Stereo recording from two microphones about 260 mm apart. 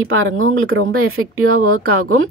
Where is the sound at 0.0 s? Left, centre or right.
Right.